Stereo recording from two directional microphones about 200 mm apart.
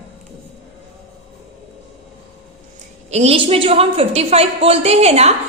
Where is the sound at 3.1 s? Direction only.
30° right (ahead or behind).